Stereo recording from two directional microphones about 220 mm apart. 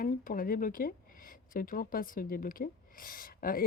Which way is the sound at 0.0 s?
40° left (ahead or behind).